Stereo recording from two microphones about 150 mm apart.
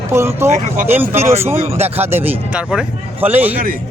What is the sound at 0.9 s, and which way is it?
Speech, 15° right (ahead or behind).